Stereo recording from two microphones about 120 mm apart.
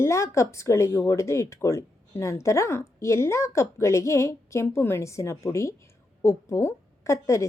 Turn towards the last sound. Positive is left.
turn(degrees=25)  # may be behind; listen again after turning